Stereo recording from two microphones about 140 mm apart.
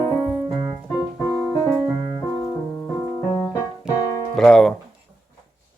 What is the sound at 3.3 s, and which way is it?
Music, 20° left (ahead or behind).